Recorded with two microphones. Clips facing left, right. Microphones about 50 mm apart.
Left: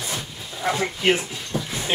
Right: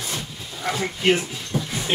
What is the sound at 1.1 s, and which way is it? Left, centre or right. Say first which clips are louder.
Speech: right 1 dB; centre.